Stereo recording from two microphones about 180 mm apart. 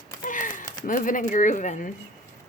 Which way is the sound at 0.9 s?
45° left (ahead or behind).